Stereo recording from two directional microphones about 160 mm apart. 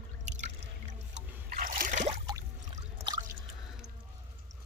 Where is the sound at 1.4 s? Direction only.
60° right (ahead or behind).